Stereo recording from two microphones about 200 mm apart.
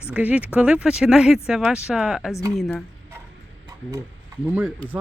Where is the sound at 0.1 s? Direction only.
5° right (ahead or behind).